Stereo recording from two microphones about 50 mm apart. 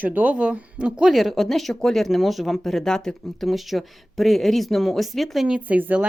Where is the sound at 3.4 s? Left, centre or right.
Centre.